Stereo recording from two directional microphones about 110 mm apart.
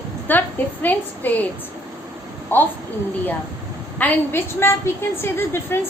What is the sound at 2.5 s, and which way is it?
Speech, 20° left (ahead or behind).